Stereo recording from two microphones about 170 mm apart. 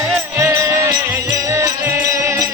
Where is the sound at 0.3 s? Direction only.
15° right (ahead or behind).